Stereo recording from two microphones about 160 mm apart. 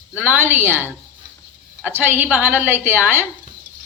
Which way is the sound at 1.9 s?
10° right (ahead or behind).